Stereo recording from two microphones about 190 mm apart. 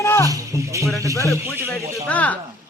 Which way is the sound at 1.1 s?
15° left (ahead or behind).